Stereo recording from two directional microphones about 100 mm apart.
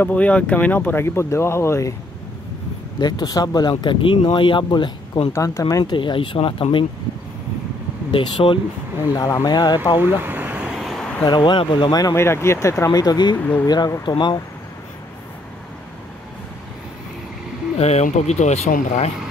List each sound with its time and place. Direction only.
0.0 s speech: 15° left (ahead or behind); by 2.0 s 30° left (ahead or behind)
3.0 s speech: 45° left (ahead or behind)
3.8 s speech: 60° left (ahead or behind)
5.3 s speech: 30° left (ahead or behind)
5.9 s speech: 55° left (ahead or behind)
8.1 s speech: 60° left (ahead or behind)
9.1 s speech: 35° left (ahead or behind)
9.9 s vehicle: 20° right (ahead or behind); by 11.1 s centre (ahead or behind)
11.2 s speech: 50° left (ahead or behind)
12.1 s speech: 25° left (ahead or behind); by 14.4 s 45° left (ahead or behind)
17.7 s speech: 90° left